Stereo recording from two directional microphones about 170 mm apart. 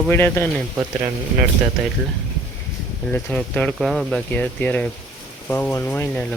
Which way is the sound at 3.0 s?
5° left (ahead or behind).